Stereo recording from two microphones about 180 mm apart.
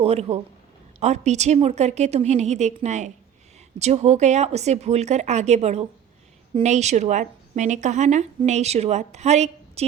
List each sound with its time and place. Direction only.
0.0 s a woman's voice: 35° right (ahead or behind)